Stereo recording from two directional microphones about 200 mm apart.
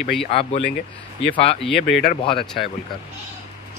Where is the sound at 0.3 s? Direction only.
30° left (ahead or behind).